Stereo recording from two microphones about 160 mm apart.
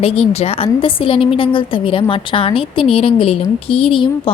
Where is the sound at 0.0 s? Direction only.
40° left (ahead or behind).